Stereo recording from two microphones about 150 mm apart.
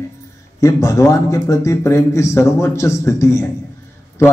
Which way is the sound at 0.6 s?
20° left (ahead or behind).